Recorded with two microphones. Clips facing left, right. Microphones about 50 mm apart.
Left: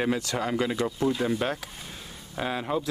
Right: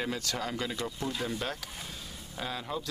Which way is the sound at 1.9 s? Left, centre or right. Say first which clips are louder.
Left 2 dB; centre.